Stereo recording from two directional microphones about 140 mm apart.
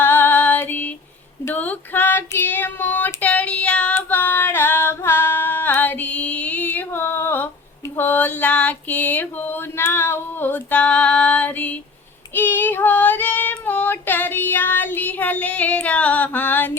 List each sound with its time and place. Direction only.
0.0 s female singing: 15° left (ahead or behind)
1.5 s child singing: 10° left (ahead or behind)
7.9 s a sound: 15° left (ahead or behind)
12.3 s child singing: 15° left (ahead or behind)